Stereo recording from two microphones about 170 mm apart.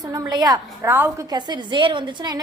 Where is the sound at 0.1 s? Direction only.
20° right (ahead or behind).